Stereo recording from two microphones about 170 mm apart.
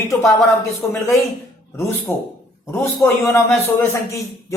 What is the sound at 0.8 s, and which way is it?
A man's voice, 15° left (ahead or behind).